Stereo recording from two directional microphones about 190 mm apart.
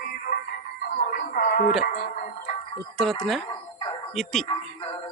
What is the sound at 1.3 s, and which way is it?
Speech, 45° left (ahead or behind).